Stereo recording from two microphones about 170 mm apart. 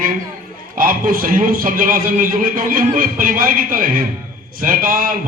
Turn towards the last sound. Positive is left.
turn(degrees=-55)  # may be behind; listen again after turning